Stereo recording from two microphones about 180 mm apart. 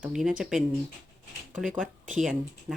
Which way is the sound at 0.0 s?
Centre (ahead or behind).